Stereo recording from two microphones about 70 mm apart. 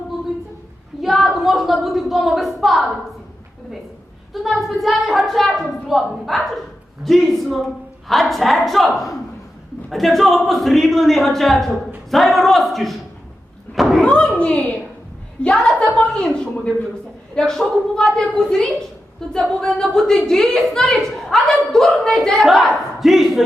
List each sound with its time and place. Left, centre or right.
1.0 s a woman's voice: centre
4.4 s a woman's voice: centre
13.7 s door: centre
14.0 s a sound: centre
15.4 s a woman's voice: centre